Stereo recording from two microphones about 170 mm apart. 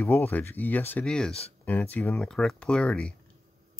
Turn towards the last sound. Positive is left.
turn(degrees=5)  # may be behind; listen again after turning